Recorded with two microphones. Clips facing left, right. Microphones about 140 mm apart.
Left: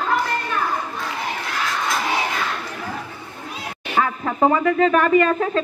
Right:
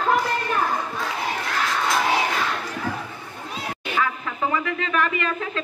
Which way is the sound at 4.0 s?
40° left (ahead or behind).